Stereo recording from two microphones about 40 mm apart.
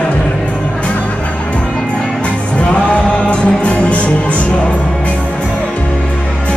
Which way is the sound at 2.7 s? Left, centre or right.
Left.